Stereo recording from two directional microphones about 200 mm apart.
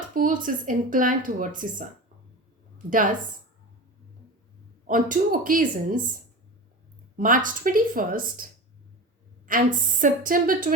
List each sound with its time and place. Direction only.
0.1 s speech: 40° right (ahead or behind)
2.7 s speech: 40° right (ahead or behind)
4.9 s a woman's voice: 40° right (ahead or behind)
7.2 s a woman's voice: 40° right (ahead or behind)
9.5 s a woman's voice: 40° right (ahead or behind)